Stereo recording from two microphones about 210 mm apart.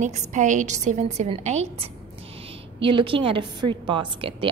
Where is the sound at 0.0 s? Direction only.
35° right (ahead or behind).